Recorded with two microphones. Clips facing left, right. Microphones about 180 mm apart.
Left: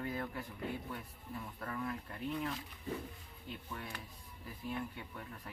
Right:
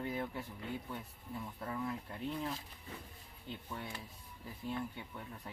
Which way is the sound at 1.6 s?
20° right (ahead or behind).